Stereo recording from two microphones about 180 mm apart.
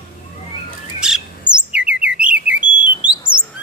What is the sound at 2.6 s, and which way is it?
Bird, 25° left (ahead or behind).